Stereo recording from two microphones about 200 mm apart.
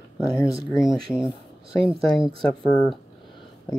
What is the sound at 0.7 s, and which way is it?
Speech, centre (ahead or behind).